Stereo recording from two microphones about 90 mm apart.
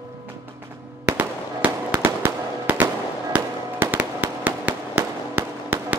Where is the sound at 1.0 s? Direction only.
15° right (ahead or behind).